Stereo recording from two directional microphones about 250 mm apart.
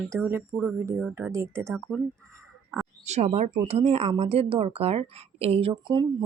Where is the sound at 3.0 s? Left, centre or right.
Right.